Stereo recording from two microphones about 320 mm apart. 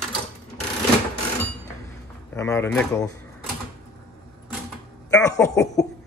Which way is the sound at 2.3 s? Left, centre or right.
Centre.